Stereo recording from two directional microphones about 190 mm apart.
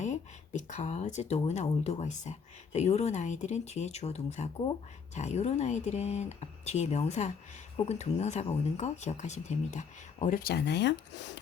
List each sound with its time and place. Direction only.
0.0 s speech: 40° left (ahead or behind); by 10.9 s 65° left (ahead or behind)